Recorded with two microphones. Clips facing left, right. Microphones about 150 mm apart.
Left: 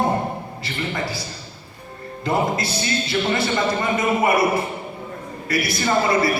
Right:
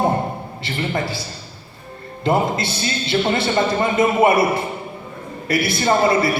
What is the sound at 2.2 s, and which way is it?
A man's voice, 25° right (ahead or behind).